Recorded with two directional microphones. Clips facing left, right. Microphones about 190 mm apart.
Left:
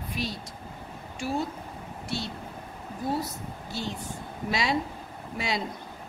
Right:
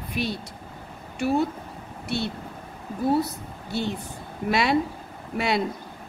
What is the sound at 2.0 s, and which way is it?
Speech, 60° right (ahead or behind).